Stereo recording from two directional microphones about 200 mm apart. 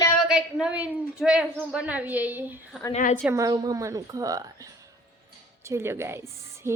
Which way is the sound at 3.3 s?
15° right (ahead or behind).